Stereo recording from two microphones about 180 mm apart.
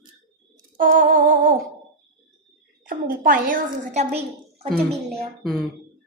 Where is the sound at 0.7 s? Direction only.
50° right (ahead or behind).